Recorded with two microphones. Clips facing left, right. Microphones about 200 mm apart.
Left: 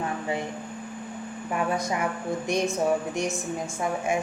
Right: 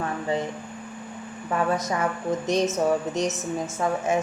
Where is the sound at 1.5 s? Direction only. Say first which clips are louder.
Right 2 dB; 15° left (ahead or behind).